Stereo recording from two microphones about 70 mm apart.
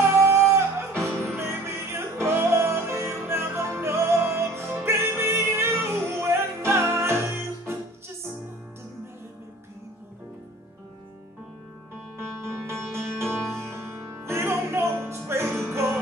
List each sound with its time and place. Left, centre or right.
0.0 s music: right
12.2 s music: right